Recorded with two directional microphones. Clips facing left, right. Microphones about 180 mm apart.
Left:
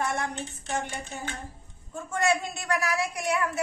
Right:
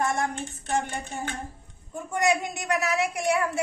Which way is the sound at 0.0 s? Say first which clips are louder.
Right 3 dB; 50° right (ahead or behind).